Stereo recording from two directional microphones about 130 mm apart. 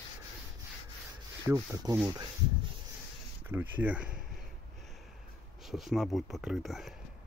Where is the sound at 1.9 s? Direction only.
30° right (ahead or behind).